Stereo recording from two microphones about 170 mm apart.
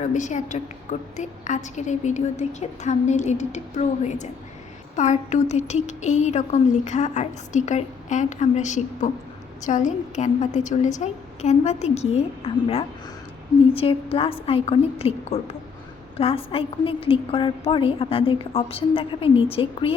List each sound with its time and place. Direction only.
0.0 s a woman's voice: 45° left (ahead or behind)